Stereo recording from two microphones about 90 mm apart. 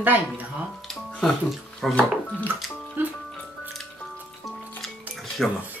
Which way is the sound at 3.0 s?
20° right (ahead or behind).